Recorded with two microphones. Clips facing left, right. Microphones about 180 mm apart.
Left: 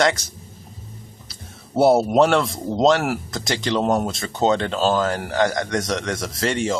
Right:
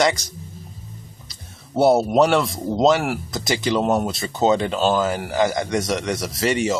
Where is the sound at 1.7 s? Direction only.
Centre (ahead or behind).